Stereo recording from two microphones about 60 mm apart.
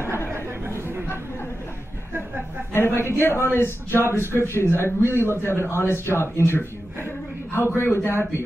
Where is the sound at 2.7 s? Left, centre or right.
Left.